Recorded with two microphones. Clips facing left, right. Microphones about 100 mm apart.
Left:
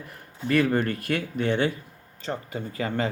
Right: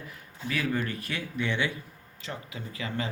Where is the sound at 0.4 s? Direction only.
55° left (ahead or behind).